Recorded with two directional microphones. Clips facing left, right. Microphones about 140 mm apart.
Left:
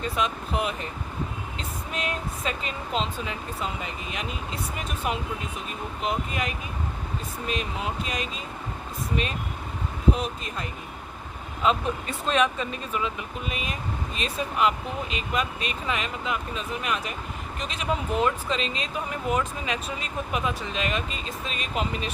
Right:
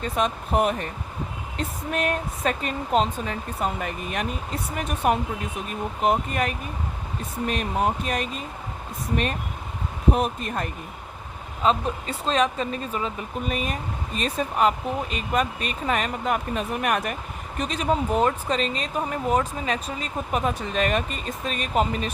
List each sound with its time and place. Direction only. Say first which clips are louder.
0.0 s speech: right 2 dB; 45° right (ahead or behind)
10.1 s speech: right 3 dB; 50° right (ahead or behind)
11.6 s speech: right 2 dB; 35° right (ahead or behind); by 17.2 s 55° right (ahead or behind)
17.6 s speech: right 6 dB; 40° right (ahead or behind)